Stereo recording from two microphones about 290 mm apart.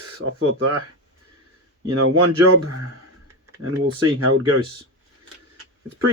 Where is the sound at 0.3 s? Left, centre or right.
Right.